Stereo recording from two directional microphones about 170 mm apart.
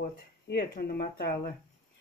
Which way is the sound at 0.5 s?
70° left (ahead or behind).